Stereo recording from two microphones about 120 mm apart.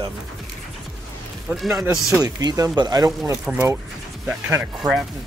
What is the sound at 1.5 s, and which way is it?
Speech, centre (ahead or behind).